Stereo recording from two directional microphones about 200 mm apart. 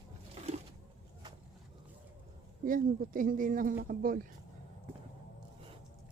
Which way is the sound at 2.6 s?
45° right (ahead or behind).